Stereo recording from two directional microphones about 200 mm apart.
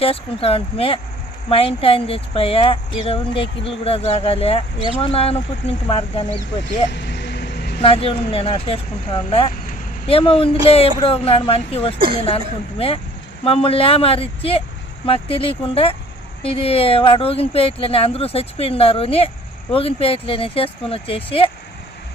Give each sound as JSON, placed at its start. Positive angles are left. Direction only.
{"t": 0.0, "sound": "speech", "side_deg": 30}
{"t": 6.9, "sound": "vehicle", "side_deg": 60}
{"t": 7.8, "sound": "speech", "side_deg": 30}
{"t": 13.4, "sound": "speech", "side_deg": 30}